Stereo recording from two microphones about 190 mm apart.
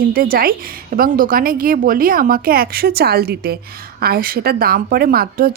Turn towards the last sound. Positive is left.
turn(degrees=-50)  # may be behind; listen again after turning